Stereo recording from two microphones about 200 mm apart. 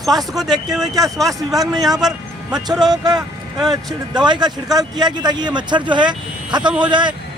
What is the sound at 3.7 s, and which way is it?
Speech, 20° right (ahead or behind).